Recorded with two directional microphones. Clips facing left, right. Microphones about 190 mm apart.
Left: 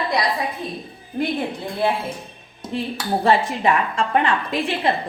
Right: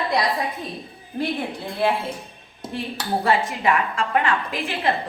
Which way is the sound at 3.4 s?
35° left (ahead or behind).